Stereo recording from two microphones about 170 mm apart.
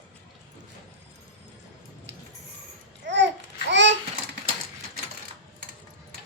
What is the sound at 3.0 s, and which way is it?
Babbling, 90° right.